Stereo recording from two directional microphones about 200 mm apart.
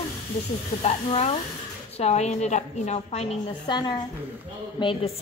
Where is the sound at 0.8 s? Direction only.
30° left (ahead or behind).